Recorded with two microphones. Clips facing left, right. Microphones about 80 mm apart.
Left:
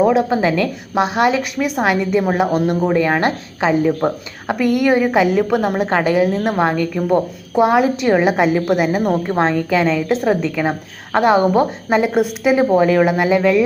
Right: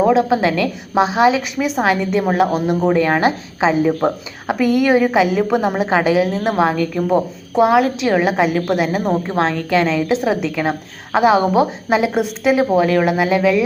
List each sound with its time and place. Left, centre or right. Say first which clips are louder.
0.0 s a woman's voice: even; centre
3.6 s speech: even; centre
4.0 s a woman's voice: right 1 dB; centre